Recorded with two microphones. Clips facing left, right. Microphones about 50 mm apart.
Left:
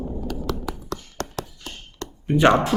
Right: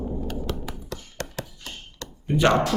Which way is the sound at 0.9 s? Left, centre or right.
Left.